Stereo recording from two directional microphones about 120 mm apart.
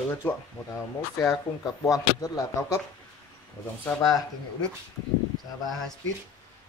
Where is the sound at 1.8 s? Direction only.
30° left (ahead or behind).